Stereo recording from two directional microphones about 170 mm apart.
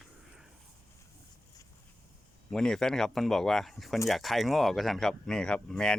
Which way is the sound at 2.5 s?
5° left (ahead or behind).